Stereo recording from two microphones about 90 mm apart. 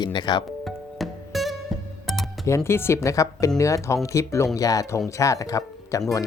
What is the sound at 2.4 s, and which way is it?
Speech, 30° left (ahead or behind).